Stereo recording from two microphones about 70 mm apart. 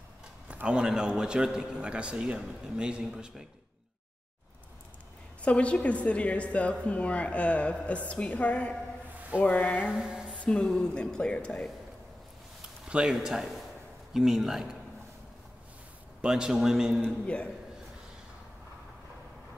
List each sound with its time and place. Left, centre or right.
0.5 s a man's voice: centre
5.4 s a woman's voice: centre
9.8 s mantra: centre
10.3 s a woman's voice: centre
12.8 s a man's voice: centre
16.2 s a man's voice: centre
17.0 s a woman's voice: centre